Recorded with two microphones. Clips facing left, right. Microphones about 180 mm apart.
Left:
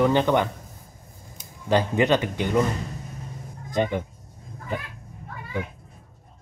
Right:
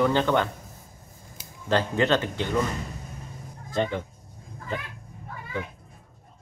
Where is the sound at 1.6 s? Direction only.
15° left (ahead or behind).